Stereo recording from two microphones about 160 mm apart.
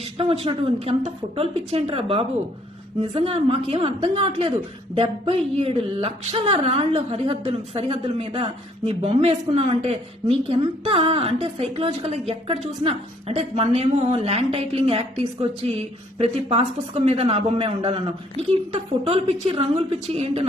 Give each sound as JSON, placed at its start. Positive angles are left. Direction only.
{"t": 0.0, "sound": "speech", "side_deg": -35}